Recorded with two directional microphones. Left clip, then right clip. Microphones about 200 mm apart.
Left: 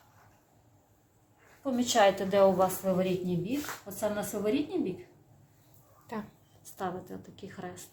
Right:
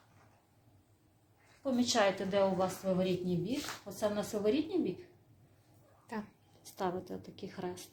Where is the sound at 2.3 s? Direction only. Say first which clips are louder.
Left 7 dB; 5° left (ahead or behind).